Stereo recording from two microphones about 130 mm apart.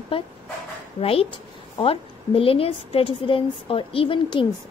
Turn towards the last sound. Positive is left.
turn(degrees=40)  # may be behind; listen again after turning